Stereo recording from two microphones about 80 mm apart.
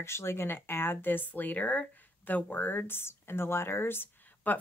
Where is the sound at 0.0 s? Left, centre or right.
Left.